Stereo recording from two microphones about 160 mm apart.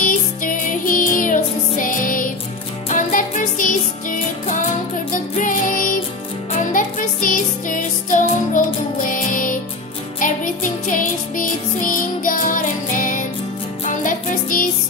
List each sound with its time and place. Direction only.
0.0 s music: 55° left (ahead or behind)